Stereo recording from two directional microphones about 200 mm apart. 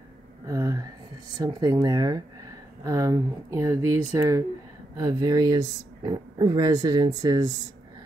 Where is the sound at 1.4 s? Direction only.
15° right (ahead or behind).